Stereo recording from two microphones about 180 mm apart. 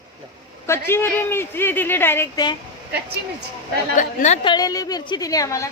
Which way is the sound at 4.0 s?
40° left (ahead or behind).